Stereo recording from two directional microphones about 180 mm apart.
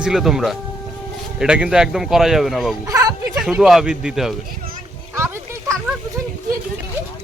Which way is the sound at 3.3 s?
5° right (ahead or behind).